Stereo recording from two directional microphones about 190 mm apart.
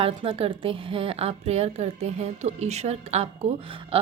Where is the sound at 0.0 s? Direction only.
30° right (ahead or behind).